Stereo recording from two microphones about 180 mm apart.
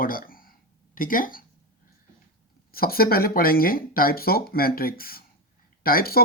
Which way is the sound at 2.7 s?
55° left (ahead or behind).